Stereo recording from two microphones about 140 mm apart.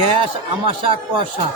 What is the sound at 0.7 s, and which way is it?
Speech, 40° right (ahead or behind).